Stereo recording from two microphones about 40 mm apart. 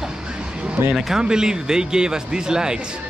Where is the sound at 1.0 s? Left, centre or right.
Centre.